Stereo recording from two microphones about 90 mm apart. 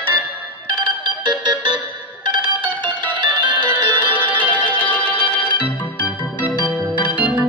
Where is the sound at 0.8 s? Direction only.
55° right (ahead or behind).